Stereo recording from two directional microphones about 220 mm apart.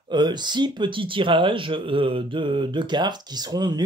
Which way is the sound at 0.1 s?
20° right (ahead or behind).